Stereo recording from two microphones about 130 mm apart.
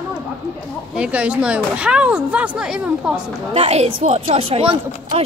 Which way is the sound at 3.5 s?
55° right (ahead or behind).